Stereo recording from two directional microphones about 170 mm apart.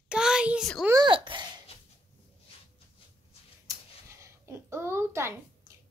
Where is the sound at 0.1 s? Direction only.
5° right (ahead or behind).